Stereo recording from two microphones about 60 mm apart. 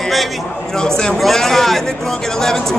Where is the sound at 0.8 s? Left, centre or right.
Centre.